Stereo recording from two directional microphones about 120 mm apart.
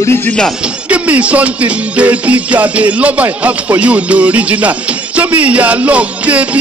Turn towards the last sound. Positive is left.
turn(degrees=-10)  # may be behind; listen again after turning